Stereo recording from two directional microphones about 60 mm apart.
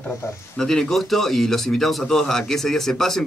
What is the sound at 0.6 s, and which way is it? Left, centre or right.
Speech, centre.